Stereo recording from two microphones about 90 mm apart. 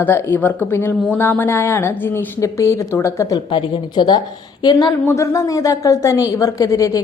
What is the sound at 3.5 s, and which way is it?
A woman's voice, 75° left (ahead or behind).